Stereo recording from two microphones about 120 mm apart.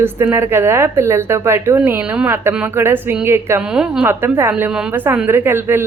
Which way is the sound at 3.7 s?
5° right (ahead or behind).